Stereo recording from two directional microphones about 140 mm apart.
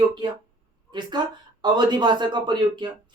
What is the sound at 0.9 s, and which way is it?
Speech, 30° right (ahead or behind).